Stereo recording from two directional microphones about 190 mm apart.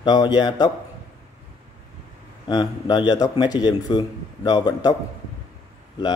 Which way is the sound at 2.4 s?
25° left (ahead or behind).